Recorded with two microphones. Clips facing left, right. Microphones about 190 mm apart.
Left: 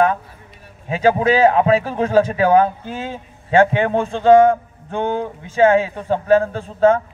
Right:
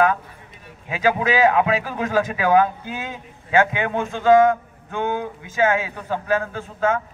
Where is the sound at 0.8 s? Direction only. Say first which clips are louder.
Left 5 dB; 30° left (ahead or behind).